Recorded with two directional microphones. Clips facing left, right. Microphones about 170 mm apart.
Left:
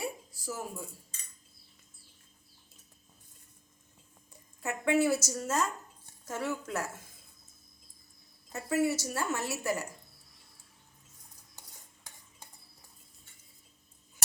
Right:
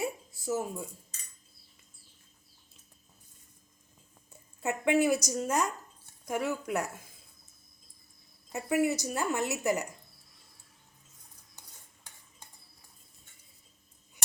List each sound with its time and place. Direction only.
0.0 s a sound: 20° right (ahead or behind)
4.6 s a woman's voice: 15° right (ahead or behind)
8.5 s a woman's voice: 15° right (ahead or behind)